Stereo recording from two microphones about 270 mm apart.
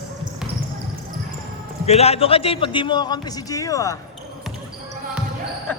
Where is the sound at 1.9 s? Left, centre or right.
Left.